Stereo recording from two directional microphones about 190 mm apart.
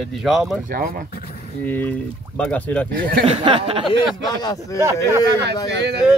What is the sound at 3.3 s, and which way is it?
Speech, 30° right (ahead or behind).